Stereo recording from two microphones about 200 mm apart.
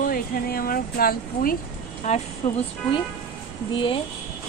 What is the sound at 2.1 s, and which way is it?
Speech, 35° left (ahead or behind).